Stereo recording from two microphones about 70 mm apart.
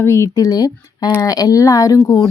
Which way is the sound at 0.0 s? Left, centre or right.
Left.